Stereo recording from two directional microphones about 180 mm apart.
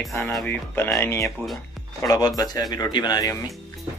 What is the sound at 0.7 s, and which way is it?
Speech, 15° left (ahead or behind).